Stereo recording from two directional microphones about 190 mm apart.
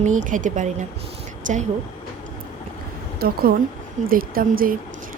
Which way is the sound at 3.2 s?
55° right (ahead or behind).